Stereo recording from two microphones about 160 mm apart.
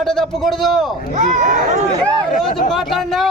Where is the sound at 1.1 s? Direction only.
50° right (ahead or behind).